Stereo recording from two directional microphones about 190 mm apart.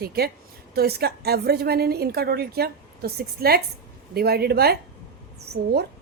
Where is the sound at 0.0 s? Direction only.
55° right (ahead or behind).